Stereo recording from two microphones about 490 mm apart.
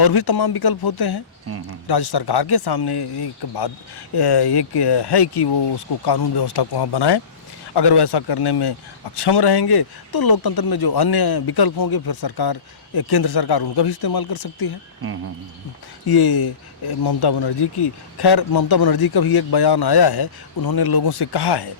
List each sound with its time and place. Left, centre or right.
0.0 s speech: left
16.0 s speech: left